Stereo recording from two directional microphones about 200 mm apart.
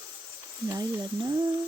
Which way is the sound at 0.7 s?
15° right (ahead or behind).